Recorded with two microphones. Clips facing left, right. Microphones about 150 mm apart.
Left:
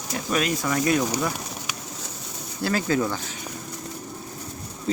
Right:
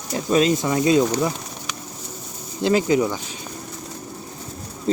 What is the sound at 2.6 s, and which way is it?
Speech, 20° right (ahead or behind).